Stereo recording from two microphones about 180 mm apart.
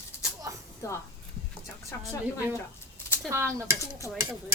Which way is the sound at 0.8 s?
15° left (ahead or behind).